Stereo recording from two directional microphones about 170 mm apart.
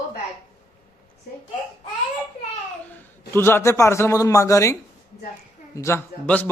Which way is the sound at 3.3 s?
15° left (ahead or behind).